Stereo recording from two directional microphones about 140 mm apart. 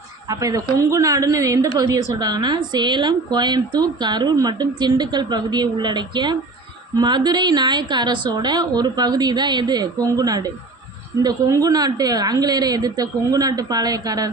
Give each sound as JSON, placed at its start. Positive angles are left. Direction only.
{"t": 0.3, "sound": "a woman's voice", "side_deg": -25}